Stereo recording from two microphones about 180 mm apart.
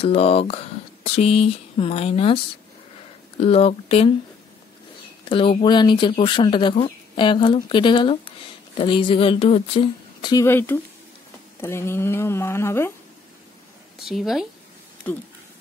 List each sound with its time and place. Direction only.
0.0 s speech: 35° left (ahead or behind)
5.3 s speech: 30° left (ahead or behind)
10.4 s speech: 15° left (ahead or behind)
14.0 s a woman's voice: centre (ahead or behind)
15.1 s speech: 10° left (ahead or behind)